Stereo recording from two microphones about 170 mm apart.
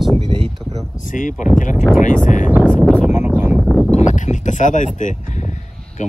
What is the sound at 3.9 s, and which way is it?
Speech, 45° left (ahead or behind).